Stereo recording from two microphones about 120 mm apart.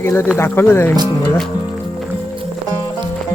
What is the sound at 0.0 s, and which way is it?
Speech, 20° left (ahead or behind).